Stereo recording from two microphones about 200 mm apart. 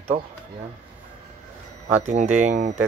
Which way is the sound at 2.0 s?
35° right (ahead or behind).